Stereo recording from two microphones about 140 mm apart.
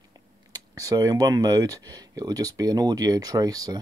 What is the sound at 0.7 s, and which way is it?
Speech, 25° right (ahead or behind).